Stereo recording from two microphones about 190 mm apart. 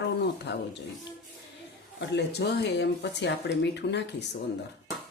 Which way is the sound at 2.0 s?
65° left (ahead or behind).